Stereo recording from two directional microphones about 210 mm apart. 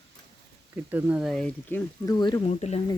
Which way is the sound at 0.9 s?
10° right (ahead or behind).